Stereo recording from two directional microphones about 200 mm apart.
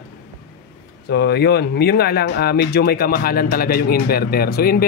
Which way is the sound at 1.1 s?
55° left (ahead or behind).